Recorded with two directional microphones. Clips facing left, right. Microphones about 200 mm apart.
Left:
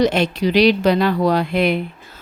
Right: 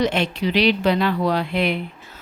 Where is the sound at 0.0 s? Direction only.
40° left (ahead or behind).